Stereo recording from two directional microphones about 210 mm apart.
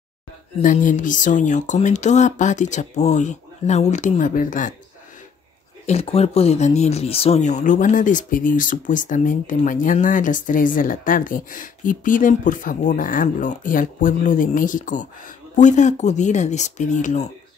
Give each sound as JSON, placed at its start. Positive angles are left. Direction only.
{"t": 0.6, "sound": "speech", "side_deg": 40}
{"t": 5.9, "sound": "speech", "side_deg": 30}